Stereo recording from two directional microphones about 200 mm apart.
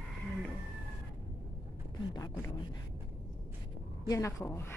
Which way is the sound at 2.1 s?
20° left (ahead or behind).